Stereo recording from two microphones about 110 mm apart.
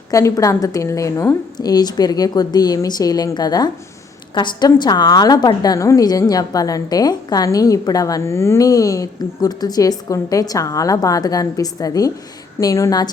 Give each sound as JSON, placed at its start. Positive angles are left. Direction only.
{"t": 0.1, "sound": "a woman's voice", "side_deg": 30}